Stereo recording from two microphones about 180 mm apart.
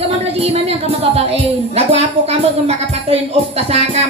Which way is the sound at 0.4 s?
35° right (ahead or behind).